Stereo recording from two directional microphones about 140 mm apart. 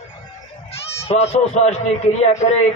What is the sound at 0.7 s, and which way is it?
Speech, 45° left (ahead or behind).